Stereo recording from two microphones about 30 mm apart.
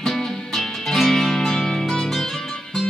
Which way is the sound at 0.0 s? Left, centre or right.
Centre.